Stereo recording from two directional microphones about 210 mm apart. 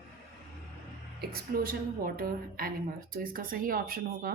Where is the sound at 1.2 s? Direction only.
45° right (ahead or behind).